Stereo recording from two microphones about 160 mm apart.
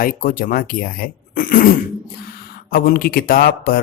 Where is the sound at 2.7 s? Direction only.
65° left (ahead or behind).